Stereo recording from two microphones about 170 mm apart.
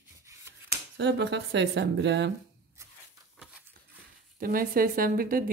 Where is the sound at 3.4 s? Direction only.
5° right (ahead or behind).